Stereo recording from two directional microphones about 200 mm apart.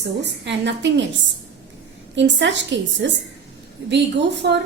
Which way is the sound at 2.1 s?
65° right (ahead or behind).